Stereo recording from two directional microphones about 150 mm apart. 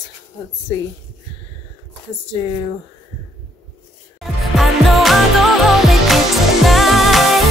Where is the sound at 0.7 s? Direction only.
20° left (ahead or behind).